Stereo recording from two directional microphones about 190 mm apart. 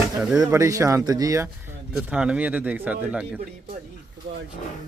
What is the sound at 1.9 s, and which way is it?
Speech, 5° right (ahead or behind).